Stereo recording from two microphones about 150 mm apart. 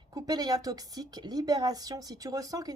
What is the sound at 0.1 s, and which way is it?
A woman's voice, 25° right (ahead or behind).